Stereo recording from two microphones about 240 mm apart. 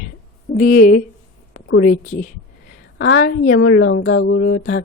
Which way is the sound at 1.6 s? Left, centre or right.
Left.